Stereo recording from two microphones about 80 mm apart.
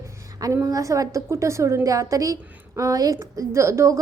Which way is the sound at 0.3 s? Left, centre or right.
Right.